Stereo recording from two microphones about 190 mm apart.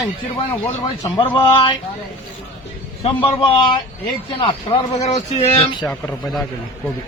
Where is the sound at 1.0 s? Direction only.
25° left (ahead or behind).